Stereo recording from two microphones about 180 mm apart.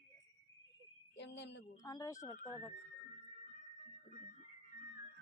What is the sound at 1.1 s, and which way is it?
Speech, 75° left (ahead or behind).